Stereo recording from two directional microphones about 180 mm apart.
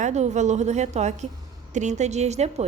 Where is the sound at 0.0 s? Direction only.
40° right (ahead or behind).